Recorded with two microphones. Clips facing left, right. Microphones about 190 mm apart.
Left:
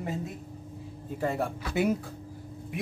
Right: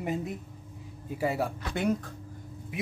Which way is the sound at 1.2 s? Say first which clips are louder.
Even; 5° right (ahead or behind).